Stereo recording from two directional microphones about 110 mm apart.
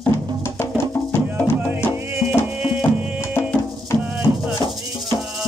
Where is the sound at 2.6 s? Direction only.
5° right (ahead or behind).